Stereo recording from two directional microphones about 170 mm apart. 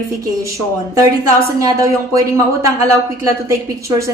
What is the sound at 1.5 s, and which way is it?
Speech, 20° right (ahead or behind).